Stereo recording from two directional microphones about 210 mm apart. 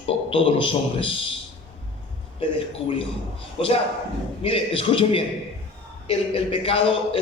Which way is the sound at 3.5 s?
25° left (ahead or behind).